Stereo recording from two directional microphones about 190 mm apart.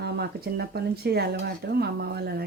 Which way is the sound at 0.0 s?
55° right (ahead or behind).